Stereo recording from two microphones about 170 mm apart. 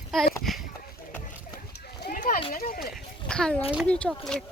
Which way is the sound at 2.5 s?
60° left (ahead or behind).